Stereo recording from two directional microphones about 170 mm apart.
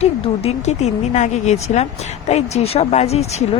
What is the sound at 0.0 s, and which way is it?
Speech, 40° left (ahead or behind).